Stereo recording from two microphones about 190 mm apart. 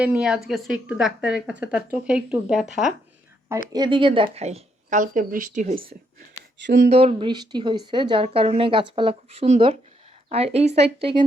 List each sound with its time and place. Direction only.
0.0 s speech: 5° right (ahead or behind)
3.7 s speech: 25° right (ahead or behind); by 5.8 s 40° right (ahead or behind)
6.7 s speech: 65° right (ahead or behind)
6.9 s speech: 30° right (ahead or behind)